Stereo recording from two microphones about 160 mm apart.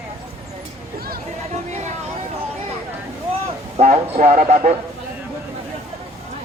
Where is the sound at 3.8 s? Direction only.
40° right (ahead or behind).